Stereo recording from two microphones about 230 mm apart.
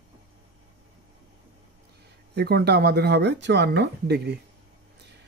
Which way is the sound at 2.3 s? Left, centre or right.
Right.